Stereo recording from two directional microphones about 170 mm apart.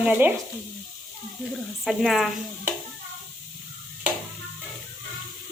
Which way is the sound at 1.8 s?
Centre (ahead or behind).